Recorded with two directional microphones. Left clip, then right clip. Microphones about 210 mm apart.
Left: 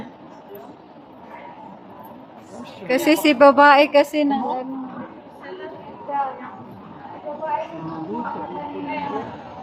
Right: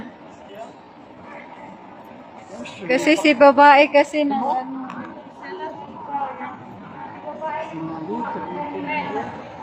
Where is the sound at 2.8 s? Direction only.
10° left (ahead or behind).